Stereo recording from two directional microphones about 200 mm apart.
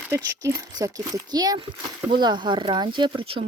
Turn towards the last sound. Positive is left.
turn(degrees=-25)  # may be behind; listen again after turning